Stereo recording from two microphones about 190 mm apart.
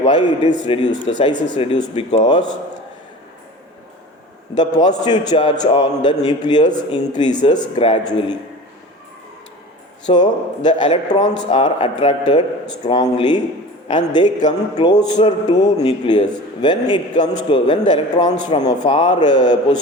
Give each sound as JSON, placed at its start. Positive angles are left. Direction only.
{"t": 0.0, "sound": "a man's voice", "side_deg": 25}
{"t": 4.5, "sound": "a man's voice", "side_deg": 20}
{"t": 10.1, "sound": "a man's voice", "side_deg": 25}